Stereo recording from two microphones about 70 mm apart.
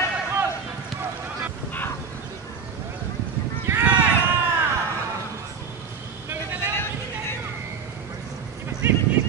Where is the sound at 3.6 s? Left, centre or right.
Right.